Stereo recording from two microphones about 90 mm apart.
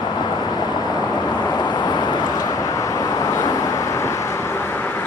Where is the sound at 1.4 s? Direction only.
50° left (ahead or behind); by 5.0 s 20° left (ahead or behind).